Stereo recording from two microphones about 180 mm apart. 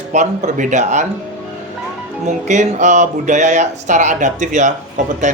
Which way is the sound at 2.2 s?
40° right (ahead or behind).